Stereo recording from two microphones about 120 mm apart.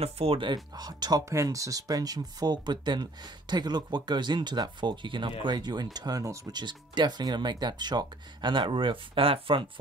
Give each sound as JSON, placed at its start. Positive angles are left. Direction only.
{"t": 0.0, "sound": "speech", "side_deg": -55}
{"t": 0.7, "sound": "speech", "side_deg": -35}
{"t": 6.6, "sound": "speech", "side_deg": -40}